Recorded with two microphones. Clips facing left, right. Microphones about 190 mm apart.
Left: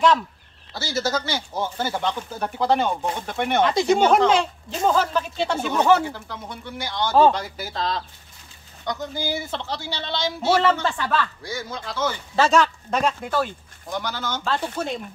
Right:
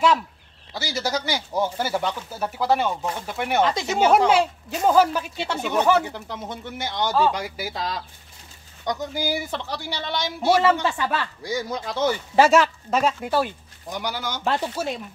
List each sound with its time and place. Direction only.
0.7 s speech: 15° right (ahead or behind)